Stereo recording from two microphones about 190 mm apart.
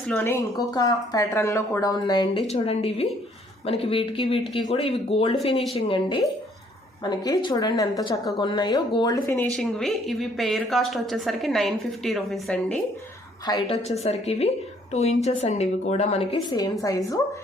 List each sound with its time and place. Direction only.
0.1 s a woman's voice: 10° left (ahead or behind)
9.5 s a woman's voice: centre (ahead or behind)
13.5 s a woman's voice: 25° left (ahead or behind)
13.8 s speech: 35° left (ahead or behind)